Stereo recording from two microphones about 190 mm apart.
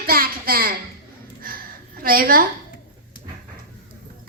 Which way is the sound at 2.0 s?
50° right (ahead or behind).